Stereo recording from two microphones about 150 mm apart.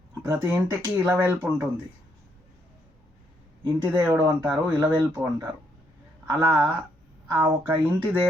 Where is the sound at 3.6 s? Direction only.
15° right (ahead or behind).